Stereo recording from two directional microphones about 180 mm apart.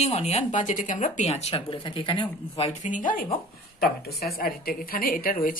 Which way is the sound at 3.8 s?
60° left (ahead or behind).